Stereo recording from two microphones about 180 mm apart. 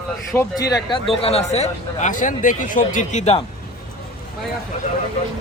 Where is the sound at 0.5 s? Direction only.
20° left (ahead or behind); by 3.3 s 40° left (ahead or behind).